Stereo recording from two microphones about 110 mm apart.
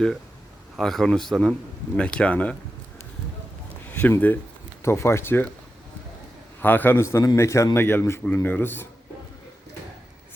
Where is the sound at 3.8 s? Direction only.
20° left (ahead or behind).